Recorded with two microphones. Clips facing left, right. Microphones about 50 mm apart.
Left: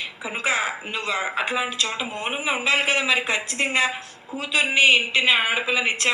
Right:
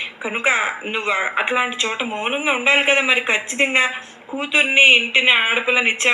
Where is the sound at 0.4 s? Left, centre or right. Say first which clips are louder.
Right 5 dB; right.